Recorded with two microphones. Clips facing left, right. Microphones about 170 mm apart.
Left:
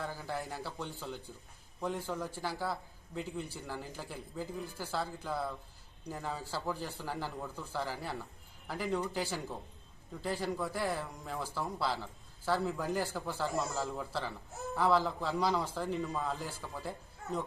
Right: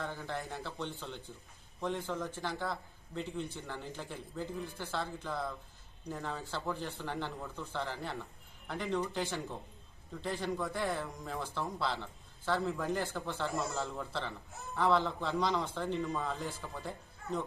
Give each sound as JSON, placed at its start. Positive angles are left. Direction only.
{"t": 0.3, "sound": "a man's voice", "side_deg": 0}